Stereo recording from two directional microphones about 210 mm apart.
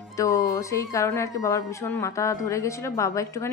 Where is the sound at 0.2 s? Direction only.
15° left (ahead or behind).